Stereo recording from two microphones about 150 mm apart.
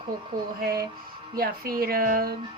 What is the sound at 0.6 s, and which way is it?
Speech, 90° right.